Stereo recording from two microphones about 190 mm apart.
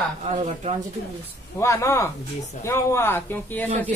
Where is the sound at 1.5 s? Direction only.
15° left (ahead or behind).